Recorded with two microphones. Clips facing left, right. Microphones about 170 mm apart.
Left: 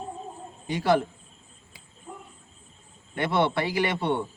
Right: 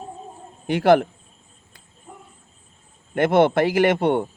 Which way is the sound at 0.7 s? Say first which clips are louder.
Right 7 dB; 60° right (ahead or behind).